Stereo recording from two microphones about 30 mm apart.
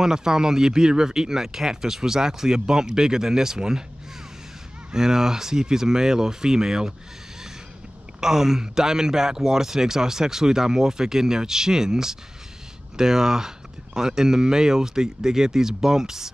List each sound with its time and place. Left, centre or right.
0.0 s speech: right
4.9 s speech: centre
8.2 s speech: centre